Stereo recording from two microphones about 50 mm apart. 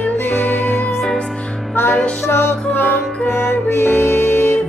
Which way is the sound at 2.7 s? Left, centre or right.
Left.